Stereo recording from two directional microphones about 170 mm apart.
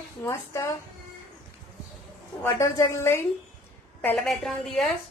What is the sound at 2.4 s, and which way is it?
Speech, 15° left (ahead or behind).